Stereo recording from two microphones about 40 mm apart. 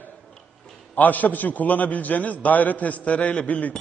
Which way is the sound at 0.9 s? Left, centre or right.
Left.